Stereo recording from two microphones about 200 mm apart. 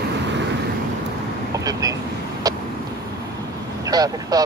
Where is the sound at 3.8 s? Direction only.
20° right (ahead or behind).